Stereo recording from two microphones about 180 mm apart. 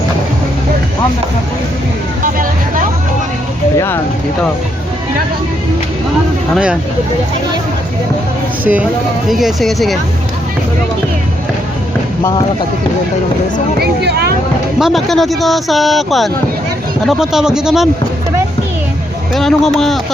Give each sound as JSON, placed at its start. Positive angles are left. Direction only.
{"t": 3.8, "sound": "speech", "side_deg": 15}
{"t": 6.5, "sound": "speech", "side_deg": -5}
{"t": 8.6, "sound": "speech", "side_deg": -10}
{"t": 13.7, "sound": "speech", "side_deg": -65}
{"t": 14.8, "sound": "speech", "side_deg": 0}
{"t": 19.3, "sound": "speech", "side_deg": 0}